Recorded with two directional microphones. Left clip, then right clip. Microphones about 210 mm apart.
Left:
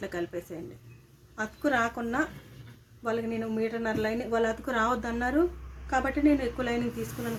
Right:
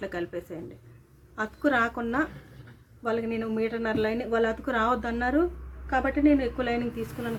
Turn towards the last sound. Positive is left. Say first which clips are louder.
# right 1 dB
turn(degrees=0)  # may be behind; listen again after turning